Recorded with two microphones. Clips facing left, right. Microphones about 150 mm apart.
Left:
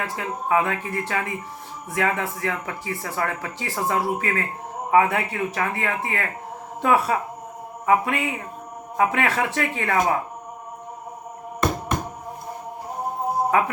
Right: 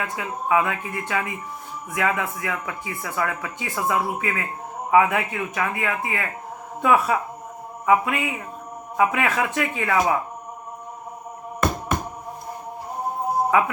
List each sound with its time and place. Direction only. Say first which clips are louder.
0.0 s speech: even; 35° left (ahead or behind)